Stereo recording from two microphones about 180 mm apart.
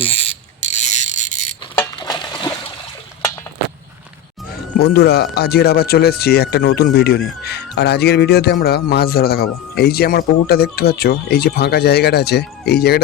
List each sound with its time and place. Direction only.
0.0 s mechanisms: 35° left (ahead or behind)
2.0 s a sound: 25° left (ahead or behind)
4.8 s speech: 60° left (ahead or behind)